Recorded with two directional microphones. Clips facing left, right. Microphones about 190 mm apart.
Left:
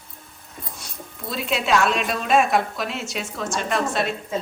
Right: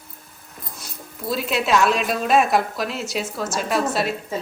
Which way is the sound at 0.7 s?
Centre (ahead or behind).